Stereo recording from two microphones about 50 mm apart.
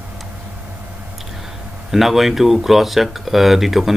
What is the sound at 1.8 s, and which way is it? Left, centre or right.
Speech, centre.